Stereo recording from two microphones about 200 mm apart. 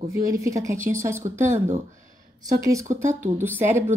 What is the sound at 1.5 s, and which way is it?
Speech, 35° right (ahead or behind).